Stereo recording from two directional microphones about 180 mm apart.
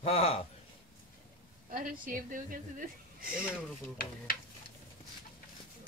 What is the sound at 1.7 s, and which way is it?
A woman's voice, 50° right (ahead or behind).